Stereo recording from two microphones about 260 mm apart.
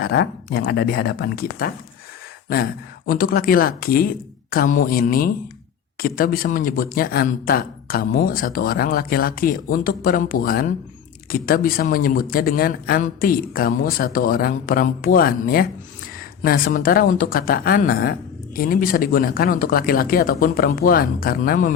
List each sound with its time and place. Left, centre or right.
0.0 s speech: left
3.1 s speech: left